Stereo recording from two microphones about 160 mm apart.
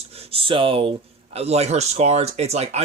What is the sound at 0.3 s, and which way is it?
Speech, 35° right (ahead or behind).